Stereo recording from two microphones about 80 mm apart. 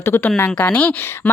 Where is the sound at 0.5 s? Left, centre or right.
Centre.